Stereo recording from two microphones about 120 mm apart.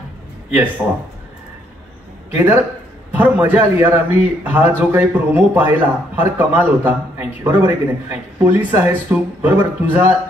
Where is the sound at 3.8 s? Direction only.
15° right (ahead or behind).